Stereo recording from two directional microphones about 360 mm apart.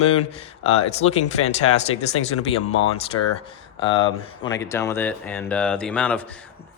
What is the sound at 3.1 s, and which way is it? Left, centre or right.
Speech, left.